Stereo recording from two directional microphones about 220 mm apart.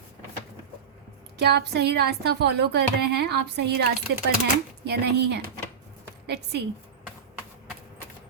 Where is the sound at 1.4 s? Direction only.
50° right (ahead or behind).